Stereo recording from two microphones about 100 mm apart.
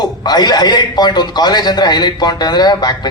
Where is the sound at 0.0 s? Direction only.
45° left (ahead or behind).